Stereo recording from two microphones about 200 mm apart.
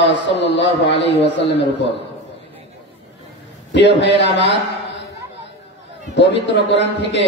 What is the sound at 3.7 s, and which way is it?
Speech, 60° left (ahead or behind).